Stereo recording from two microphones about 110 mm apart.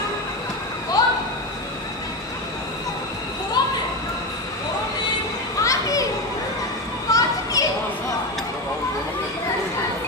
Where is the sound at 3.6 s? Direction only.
40° left (ahead or behind).